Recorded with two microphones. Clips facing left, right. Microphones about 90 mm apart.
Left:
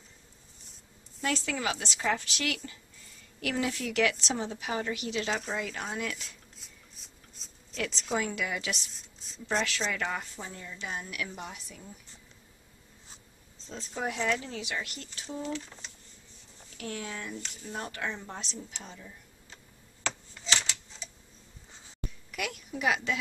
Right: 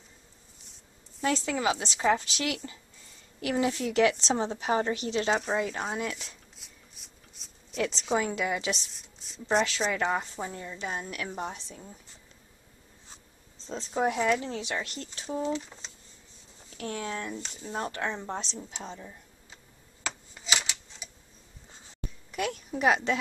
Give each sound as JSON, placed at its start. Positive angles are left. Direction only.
{"t": 1.2, "sound": "a woman's voice", "side_deg": -25}
{"t": 6.6, "sound": "a sound", "side_deg": 0}
{"t": 7.7, "sound": "a woman's voice", "side_deg": -25}
{"t": 8.9, "sound": "a woman's voice", "side_deg": 0}
{"t": 9.7, "sound": "speech", "side_deg": -25}
{"t": 13.7, "sound": "speech", "side_deg": -30}
{"t": 14.1, "sound": "a woman's voice", "side_deg": -15}
{"t": 14.4, "sound": "speech", "side_deg": -30}
{"t": 16.7, "sound": "speech", "side_deg": -30}
{"t": 19.0, "sound": "a sound", "side_deg": -15}
{"t": 22.3, "sound": "a child's voice", "side_deg": -35}